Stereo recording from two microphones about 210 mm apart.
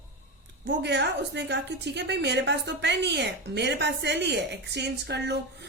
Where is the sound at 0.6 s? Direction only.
55° right (ahead or behind).